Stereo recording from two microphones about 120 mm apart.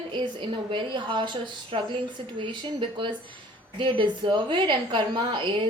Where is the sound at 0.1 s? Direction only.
40° right (ahead or behind).